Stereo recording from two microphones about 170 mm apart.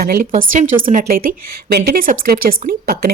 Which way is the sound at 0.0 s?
60° right (ahead or behind).